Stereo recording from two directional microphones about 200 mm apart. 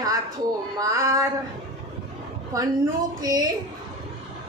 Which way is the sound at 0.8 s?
15° right (ahead or behind).